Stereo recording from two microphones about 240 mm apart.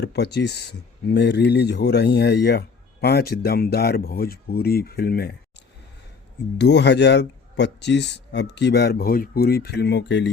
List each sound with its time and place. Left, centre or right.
0.0 s speech: left
6.6 s speech: left